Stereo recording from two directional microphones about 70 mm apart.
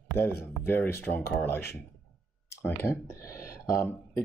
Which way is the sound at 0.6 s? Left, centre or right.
Left.